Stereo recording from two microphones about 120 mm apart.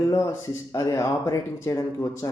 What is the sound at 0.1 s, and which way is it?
Speech, 25° left (ahead or behind).